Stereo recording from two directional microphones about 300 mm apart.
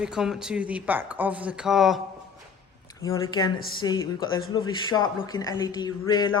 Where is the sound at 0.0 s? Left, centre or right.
Centre.